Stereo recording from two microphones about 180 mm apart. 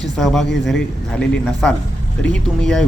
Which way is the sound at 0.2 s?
Centre (ahead or behind).